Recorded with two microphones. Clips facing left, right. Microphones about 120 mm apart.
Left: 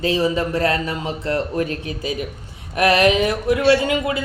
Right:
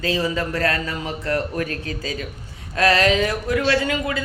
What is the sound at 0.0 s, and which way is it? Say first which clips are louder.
A man's voice: left 4 dB; 25° left (ahead or behind).